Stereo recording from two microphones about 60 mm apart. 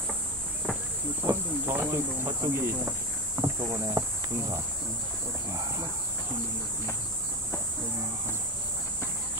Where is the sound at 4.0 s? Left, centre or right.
Right.